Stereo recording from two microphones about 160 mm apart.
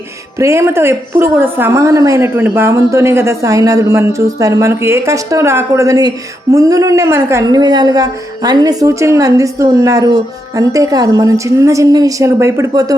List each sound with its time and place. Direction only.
0.3 s a woman's voice: 20° right (ahead or behind)